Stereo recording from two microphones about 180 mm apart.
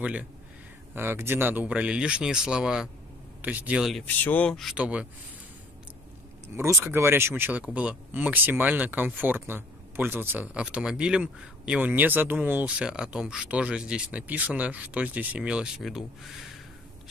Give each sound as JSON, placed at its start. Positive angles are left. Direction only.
{"t": 0.0, "sound": "speech", "side_deg": -10}
{"t": 4.0, "sound": "speech", "side_deg": 10}
{"t": 6.5, "sound": "speech", "side_deg": -15}